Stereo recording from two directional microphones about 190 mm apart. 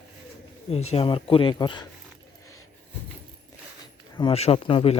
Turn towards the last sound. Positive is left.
turn(degrees=30)  # may be behind; listen again after turning